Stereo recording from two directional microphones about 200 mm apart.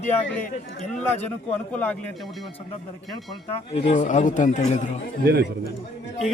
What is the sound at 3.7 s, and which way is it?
Speech, 35° left (ahead or behind).